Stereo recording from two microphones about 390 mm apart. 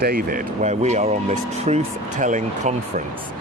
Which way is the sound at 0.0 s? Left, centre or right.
Right.